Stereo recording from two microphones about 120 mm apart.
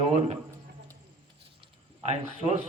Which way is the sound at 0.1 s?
65° right (ahead or behind).